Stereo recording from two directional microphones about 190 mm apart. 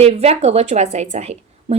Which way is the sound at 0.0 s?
35° right (ahead or behind).